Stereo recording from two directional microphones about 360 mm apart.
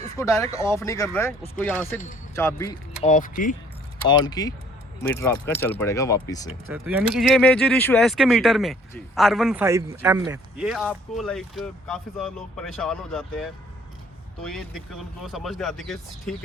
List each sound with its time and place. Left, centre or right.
0.2 s speech: centre
3.1 s speech: left
4.1 s speech: centre
6.7 s speech: centre